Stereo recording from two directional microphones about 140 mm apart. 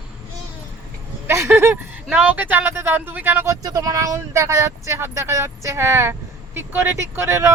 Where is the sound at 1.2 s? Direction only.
20° right (ahead or behind).